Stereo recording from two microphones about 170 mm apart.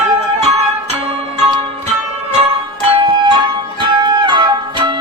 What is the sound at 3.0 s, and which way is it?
Music, 30° right (ahead or behind).